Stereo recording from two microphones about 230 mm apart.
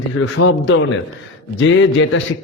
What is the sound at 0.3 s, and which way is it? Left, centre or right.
A man's voice, left.